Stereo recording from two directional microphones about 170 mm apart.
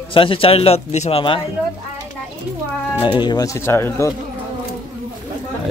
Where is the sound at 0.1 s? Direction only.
30° left (ahead or behind).